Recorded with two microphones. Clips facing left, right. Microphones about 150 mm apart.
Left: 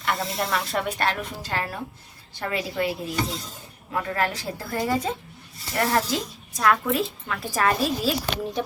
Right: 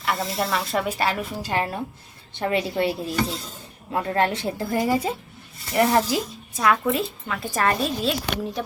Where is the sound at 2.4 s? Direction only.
25° right (ahead or behind).